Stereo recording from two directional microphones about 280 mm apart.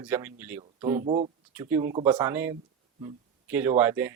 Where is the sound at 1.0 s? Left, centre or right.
Right.